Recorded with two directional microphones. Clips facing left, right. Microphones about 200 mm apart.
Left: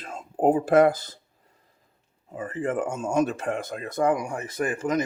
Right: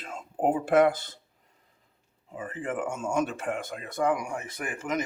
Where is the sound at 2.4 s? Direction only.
40° left (ahead or behind).